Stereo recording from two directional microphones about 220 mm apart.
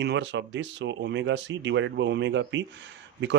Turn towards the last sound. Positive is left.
turn(degrees=-55)  # may be behind; listen again after turning